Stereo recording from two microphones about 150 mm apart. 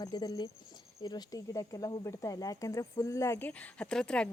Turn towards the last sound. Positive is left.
turn(degrees=5)  # may be behind; listen again after turning